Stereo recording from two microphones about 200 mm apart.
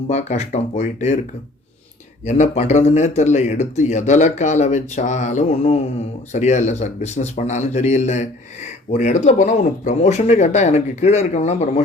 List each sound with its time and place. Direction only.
0.1 s speech: 35° left (ahead or behind)
2.2 s speech: 35° left (ahead or behind)